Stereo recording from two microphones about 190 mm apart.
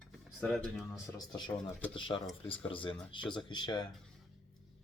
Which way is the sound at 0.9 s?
20° left (ahead or behind).